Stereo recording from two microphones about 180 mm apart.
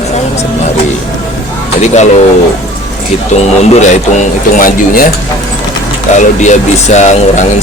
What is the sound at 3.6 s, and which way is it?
Speech, 40° left (ahead or behind).